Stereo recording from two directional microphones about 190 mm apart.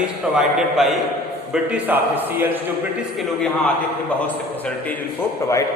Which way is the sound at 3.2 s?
5° left (ahead or behind).